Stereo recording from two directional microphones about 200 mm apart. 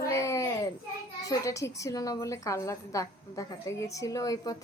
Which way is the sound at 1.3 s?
15° left (ahead or behind).